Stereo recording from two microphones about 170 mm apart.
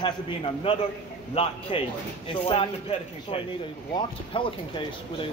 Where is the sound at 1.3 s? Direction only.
35° left (ahead or behind).